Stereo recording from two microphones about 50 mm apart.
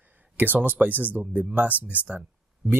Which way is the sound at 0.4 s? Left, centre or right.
Right.